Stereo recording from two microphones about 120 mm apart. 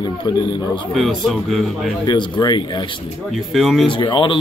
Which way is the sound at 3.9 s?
40° left (ahead or behind).